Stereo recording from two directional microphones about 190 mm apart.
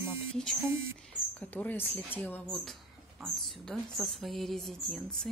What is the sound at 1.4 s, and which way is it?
Speech, 10° left (ahead or behind).